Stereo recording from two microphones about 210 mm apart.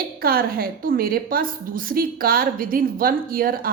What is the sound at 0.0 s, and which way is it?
A woman's voice, 45° right (ahead or behind).